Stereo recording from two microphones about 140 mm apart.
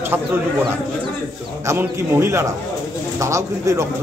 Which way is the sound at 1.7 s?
20° right (ahead or behind).